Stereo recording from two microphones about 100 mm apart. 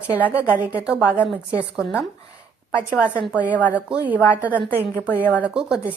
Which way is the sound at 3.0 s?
15° right (ahead or behind).